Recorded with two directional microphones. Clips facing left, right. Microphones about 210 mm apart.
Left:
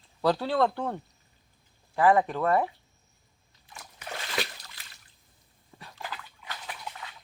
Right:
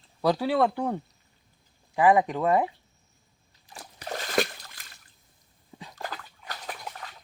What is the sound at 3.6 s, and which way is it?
Splash, 35° right (ahead or behind).